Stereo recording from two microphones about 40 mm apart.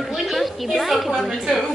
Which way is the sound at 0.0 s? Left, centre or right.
Centre.